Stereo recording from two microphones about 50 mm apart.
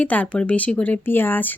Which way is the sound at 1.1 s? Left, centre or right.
Left.